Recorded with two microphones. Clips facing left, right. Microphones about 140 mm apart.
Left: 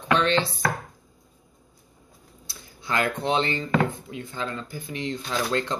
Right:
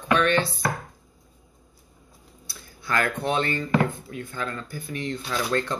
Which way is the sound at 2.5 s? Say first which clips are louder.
Right 1 dB; 20° left (ahead or behind).